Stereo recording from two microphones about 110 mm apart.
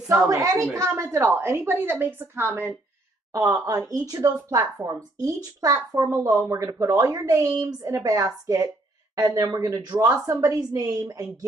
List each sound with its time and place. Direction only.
0.3 s a woman's voice: 30° right (ahead or behind)
3.3 s a woman's voice: 30° right (ahead or behind)